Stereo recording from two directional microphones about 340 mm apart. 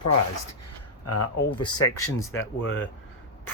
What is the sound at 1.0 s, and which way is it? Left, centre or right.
Speech, left.